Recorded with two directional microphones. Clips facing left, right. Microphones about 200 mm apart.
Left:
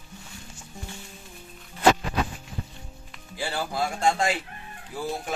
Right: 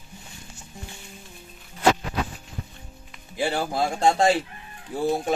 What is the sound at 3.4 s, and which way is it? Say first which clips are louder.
Speech: right 4 dB; 20° right (ahead or behind).